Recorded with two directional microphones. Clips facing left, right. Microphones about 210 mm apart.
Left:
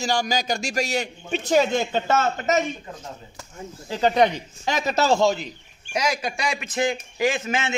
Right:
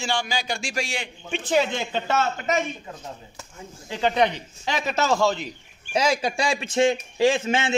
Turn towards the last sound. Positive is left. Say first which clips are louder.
# right 3 dB
turn(degrees=-30)  # may be behind; listen again after turning